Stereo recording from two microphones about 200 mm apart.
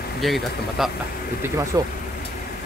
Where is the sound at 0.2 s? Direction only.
Centre (ahead or behind).